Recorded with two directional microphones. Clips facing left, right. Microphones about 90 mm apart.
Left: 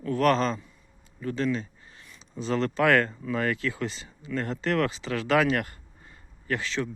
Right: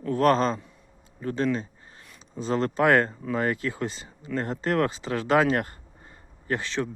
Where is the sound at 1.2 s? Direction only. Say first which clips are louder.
Right 2 dB; 40° right (ahead or behind).